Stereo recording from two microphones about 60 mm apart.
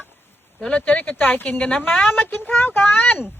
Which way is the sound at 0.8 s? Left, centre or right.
Left.